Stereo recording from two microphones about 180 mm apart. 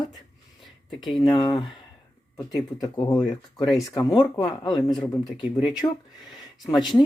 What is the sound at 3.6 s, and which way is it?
Speech, centre (ahead or behind).